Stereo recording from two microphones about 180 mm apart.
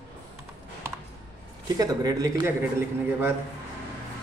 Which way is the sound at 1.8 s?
20° right (ahead or behind).